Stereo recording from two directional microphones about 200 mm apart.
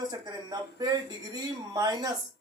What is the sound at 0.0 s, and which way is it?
Speech, 20° right (ahead or behind).